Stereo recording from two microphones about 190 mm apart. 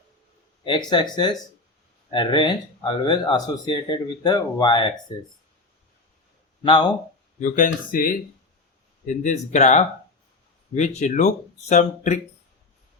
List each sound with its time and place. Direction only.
0.6 s speech: 25° left (ahead or behind)
6.6 s speech: 25° left (ahead or behind)
7.3 s speech: 40° left (ahead or behind)